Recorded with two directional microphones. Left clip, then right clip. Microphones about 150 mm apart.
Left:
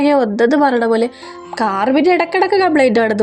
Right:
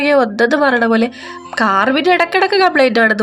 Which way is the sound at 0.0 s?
25° left (ahead or behind).